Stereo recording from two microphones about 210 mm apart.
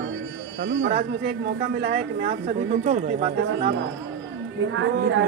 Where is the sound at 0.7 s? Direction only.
60° right (ahead or behind).